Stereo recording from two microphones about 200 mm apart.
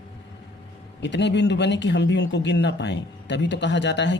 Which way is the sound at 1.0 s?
60° left (ahead or behind).